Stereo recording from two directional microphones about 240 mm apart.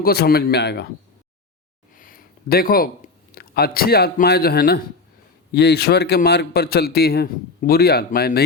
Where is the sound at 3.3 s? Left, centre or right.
Left.